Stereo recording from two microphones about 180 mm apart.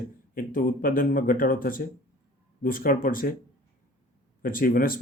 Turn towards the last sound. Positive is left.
turn(degrees=50)  # may be behind; listen again after turning